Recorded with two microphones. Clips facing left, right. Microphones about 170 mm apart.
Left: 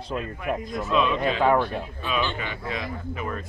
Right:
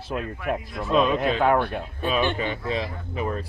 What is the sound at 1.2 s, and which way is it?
Speech, centre (ahead or behind).